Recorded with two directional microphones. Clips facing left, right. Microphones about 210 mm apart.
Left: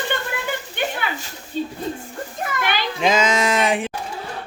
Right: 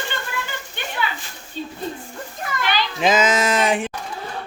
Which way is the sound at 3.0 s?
5° right (ahead or behind).